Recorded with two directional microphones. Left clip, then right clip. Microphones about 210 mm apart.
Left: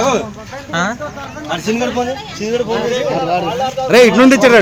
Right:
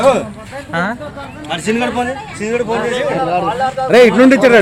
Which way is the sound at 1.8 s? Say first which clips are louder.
Even; centre (ahead or behind).